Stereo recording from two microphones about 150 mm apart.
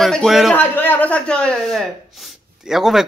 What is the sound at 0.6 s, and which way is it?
Speech, 10° left (ahead or behind).